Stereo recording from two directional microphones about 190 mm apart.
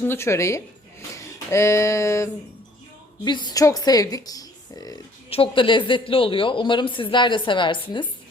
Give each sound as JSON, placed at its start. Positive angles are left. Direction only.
{"t": 0.0, "sound": "speech", "side_deg": 10}